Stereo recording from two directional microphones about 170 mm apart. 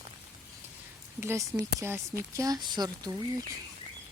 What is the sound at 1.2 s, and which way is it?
Speech, 15° right (ahead or behind).